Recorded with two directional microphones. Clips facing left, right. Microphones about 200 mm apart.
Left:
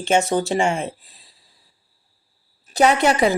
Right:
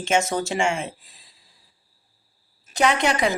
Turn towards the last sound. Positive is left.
turn(degrees=35)  # may be behind; listen again after turning